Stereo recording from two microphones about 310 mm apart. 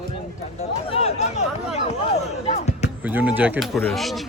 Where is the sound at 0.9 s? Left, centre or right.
Left.